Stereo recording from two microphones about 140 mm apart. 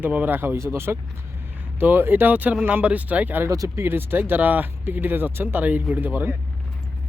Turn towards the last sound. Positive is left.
turn(degrees=-15)  # may be behind; listen again after turning